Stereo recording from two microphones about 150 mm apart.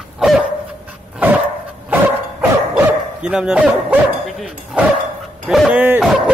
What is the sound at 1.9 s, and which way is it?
Dog, 10° right (ahead or behind).